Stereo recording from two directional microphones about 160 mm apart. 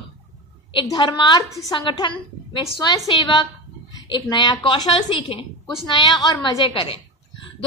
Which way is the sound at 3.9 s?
25° left (ahead or behind).